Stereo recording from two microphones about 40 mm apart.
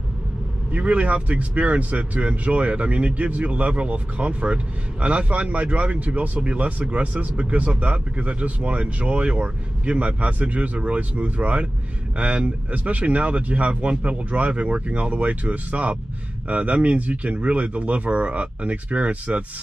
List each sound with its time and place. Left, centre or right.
0.7 s a man's voice: right